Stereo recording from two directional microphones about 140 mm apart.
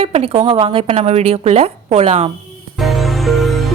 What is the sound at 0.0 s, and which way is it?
Speech, 45° right (ahead or behind).